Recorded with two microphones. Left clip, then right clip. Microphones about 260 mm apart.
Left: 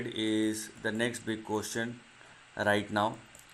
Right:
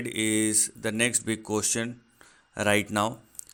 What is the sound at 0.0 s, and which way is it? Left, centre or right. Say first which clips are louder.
Speech: right 4 dB; right.